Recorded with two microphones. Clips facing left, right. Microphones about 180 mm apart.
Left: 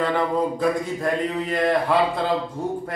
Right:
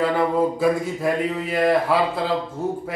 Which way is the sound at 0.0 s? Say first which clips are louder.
Right 2 dB; 5° right (ahead or behind).